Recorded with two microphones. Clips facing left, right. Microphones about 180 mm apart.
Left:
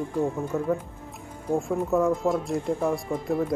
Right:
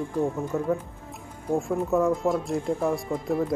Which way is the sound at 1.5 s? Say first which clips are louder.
Even; centre (ahead or behind).